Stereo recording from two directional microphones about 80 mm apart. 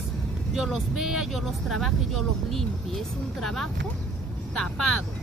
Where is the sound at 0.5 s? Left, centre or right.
Centre.